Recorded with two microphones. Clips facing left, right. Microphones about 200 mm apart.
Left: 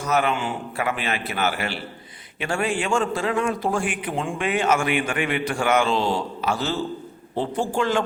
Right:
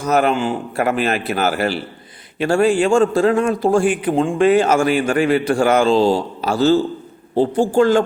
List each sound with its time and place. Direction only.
0.0 s a man's voice: 40° right (ahead or behind)